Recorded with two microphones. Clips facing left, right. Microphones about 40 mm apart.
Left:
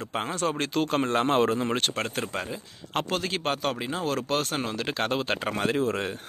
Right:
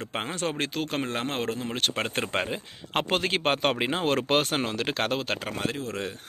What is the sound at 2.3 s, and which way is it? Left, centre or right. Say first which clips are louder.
Speech: right 4 dB; right.